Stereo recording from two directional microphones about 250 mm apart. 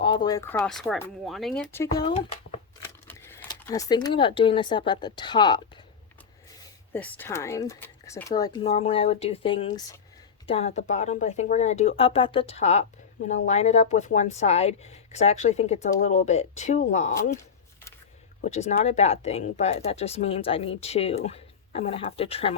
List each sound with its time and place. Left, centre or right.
0.0 s speech: centre
2.8 s a sound: centre
4.9 s speech: centre
6.9 s speech: centre; by 17.2 s left
18.4 s speech: left